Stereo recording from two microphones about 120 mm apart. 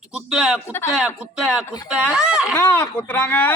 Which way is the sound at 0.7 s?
20° left (ahead or behind).